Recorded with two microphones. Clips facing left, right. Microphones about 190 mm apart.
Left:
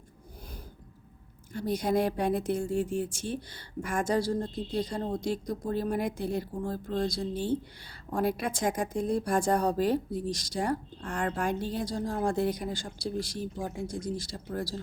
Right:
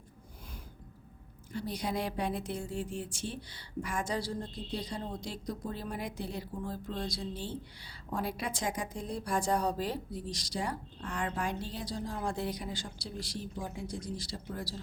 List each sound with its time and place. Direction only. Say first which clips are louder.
1.5 s a woman's voice: left 7 dB; 50° left (ahead or behind)